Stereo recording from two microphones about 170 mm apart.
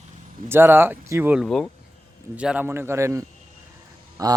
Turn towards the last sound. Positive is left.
turn(degrees=-20)  # may be behind; listen again after turning